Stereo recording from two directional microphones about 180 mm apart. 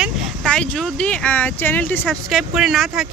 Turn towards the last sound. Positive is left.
turn(degrees=0)  # may be behind; listen again after turning